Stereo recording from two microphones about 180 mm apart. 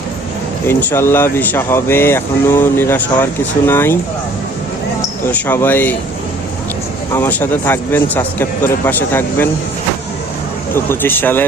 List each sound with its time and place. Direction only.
0.7 s speech: 10° left (ahead or behind)
5.3 s speech: 10° left (ahead or behind)
7.1 s speech: 10° left (ahead or behind)
10.8 s speech: 10° left (ahead or behind)